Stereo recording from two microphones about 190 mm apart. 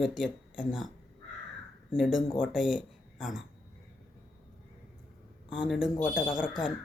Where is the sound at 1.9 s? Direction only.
5° right (ahead or behind).